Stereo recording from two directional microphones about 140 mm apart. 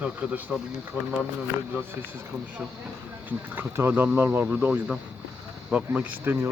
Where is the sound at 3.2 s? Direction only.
15° right (ahead or behind).